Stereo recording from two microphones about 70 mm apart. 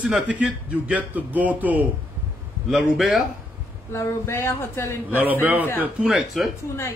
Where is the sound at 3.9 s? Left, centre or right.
Left.